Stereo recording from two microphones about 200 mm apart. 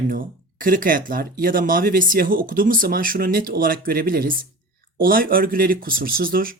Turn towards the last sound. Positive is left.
turn(degrees=-45)  # may be behind; listen again after turning